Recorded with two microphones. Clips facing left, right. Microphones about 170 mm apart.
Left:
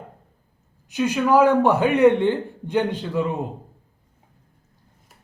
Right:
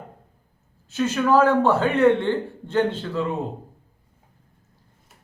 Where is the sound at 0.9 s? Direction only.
15° left (ahead or behind).